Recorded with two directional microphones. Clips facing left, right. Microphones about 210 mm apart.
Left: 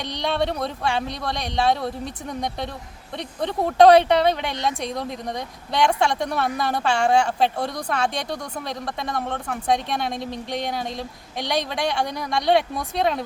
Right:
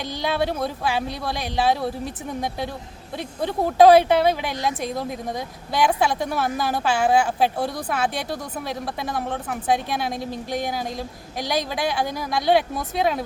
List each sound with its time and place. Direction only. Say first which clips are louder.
0.0 s a woman's voice: even; 5° right (ahead or behind)
3.2 s a woman's voice: right 1 dB; 5° right (ahead or behind)